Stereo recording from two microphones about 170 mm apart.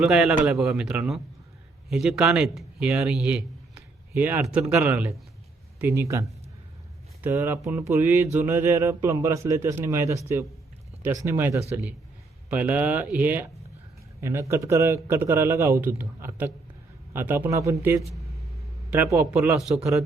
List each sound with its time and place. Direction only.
0.0 s speech: 5° right (ahead or behind)
4.1 s mantra: 10° right (ahead or behind)
19.1 s mantra: 15° right (ahead or behind)